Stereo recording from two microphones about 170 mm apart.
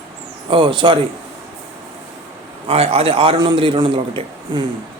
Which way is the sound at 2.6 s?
35° right (ahead or behind).